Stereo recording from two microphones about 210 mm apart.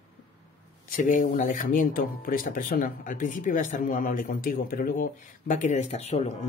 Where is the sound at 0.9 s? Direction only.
40° left (ahead or behind).